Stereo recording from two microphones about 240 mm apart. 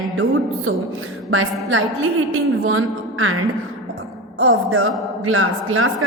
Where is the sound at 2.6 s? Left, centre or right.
Right.